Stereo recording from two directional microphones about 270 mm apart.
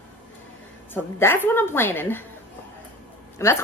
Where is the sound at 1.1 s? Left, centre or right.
Centre.